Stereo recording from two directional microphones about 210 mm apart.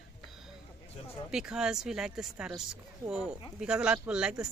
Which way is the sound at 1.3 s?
5° right (ahead or behind).